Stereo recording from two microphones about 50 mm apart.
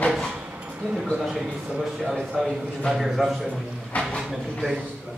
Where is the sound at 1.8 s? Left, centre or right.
Centre.